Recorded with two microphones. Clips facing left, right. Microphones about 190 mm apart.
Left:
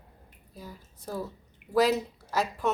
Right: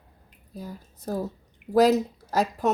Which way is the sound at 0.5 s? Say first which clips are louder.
Right 7 dB; 45° right (ahead or behind).